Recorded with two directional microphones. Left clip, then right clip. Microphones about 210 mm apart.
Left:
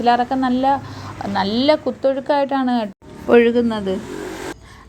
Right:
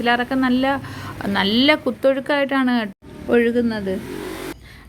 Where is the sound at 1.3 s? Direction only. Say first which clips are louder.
Right 1 dB; 40° right (ahead or behind).